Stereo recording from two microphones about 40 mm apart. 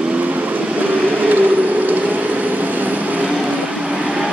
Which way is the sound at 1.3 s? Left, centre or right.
Right.